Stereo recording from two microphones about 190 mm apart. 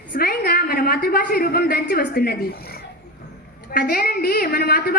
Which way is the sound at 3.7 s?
50° left (ahead or behind).